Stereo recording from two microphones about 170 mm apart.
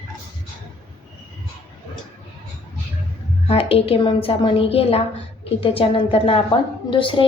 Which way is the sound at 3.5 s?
35° left (ahead or behind).